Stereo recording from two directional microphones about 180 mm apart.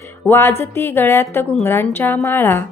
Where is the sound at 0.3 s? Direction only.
15° left (ahead or behind).